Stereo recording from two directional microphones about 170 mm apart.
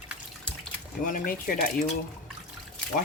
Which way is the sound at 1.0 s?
55° left (ahead or behind).